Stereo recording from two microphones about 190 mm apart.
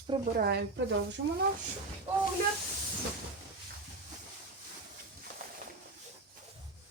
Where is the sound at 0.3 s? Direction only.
60° right (ahead or behind).